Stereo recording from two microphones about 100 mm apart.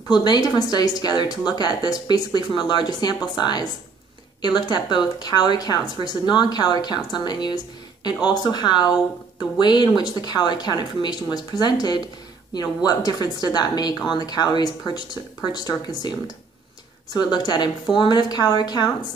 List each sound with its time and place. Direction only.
0.1 s a woman's voice: 45° left (ahead or behind)